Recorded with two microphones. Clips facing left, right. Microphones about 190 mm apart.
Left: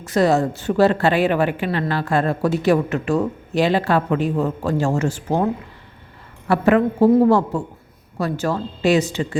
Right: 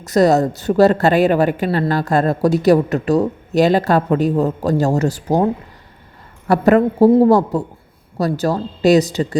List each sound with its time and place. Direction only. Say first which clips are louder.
0.0 s a woman's voice: right 4 dB; 40° right (ahead or behind)
6.5 s a woman's voice: right 3 dB; 40° right (ahead or behind)